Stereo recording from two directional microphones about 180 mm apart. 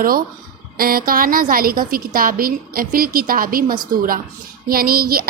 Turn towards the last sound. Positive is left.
turn(degrees=-55)  # may be behind; listen again after turning